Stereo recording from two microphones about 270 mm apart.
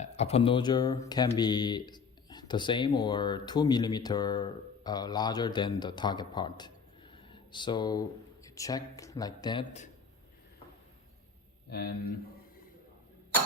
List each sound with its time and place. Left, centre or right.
0.0 s speech: left
7.1 s a sound: centre
8.4 s speech: centre
11.7 s speech: left